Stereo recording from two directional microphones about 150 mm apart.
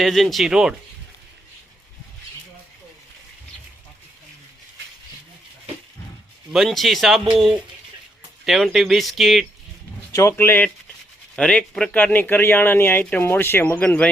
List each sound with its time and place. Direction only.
0.0 s speech: centre (ahead or behind)
6.5 s speech: centre (ahead or behind)
10.1 s speech: 20° left (ahead or behind)